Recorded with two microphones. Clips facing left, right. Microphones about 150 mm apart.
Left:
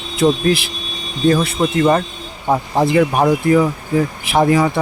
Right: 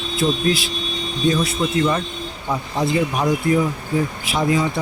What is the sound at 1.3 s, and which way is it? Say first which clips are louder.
Speech: left 5 dB; 55° left (ahead or behind).